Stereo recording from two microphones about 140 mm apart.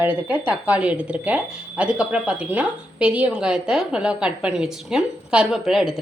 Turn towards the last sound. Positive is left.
turn(degrees=0)  # may be behind; listen again after turning